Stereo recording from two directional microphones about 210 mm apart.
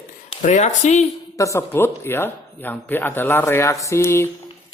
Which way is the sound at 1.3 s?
15° left (ahead or behind).